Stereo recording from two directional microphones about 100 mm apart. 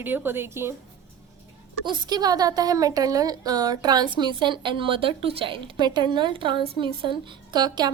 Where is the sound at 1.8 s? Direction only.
45° right (ahead or behind).